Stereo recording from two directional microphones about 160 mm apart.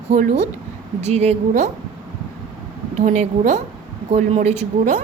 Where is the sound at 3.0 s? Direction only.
50° right (ahead or behind).